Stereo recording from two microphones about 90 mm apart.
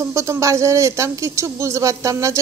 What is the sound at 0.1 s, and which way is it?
A woman's voice, 35° right (ahead or behind).